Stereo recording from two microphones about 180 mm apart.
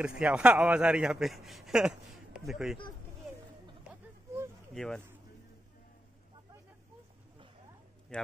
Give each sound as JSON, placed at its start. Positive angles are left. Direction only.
{"t": 0.2, "sound": "a man's voice", "side_deg": -5}
{"t": 4.3, "sound": "a sound", "side_deg": -15}
{"t": 4.7, "sound": "a man's voice", "side_deg": 5}
{"t": 8.1, "sound": "a man's voice", "side_deg": 5}